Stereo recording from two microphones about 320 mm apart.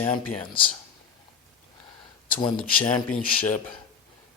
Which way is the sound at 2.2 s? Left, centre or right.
Centre.